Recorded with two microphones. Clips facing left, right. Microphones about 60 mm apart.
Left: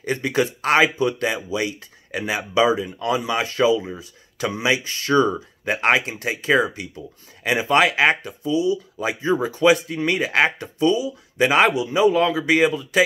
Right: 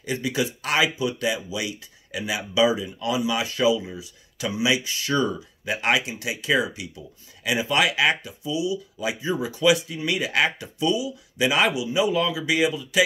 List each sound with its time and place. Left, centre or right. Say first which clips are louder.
0.0 s speech: left 4 dB; left